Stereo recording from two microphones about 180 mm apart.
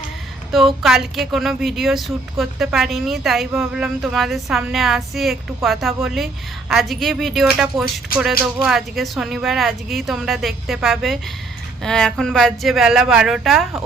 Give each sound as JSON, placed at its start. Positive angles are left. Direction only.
{"t": 0.5, "sound": "speech", "side_deg": 0}